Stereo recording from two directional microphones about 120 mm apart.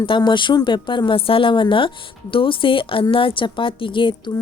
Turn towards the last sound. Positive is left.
turn(degrees=45)  # may be behind; listen again after turning